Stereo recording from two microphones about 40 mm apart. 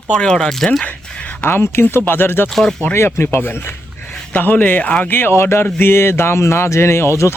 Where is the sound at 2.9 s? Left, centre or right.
Left.